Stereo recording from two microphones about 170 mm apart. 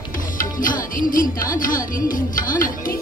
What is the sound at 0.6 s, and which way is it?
Music, 55° left (ahead or behind).